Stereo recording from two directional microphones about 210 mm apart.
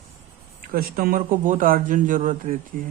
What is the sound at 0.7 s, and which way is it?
Speech, 45° right (ahead or behind).